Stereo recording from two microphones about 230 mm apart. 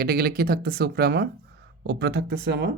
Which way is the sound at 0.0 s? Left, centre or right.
Right.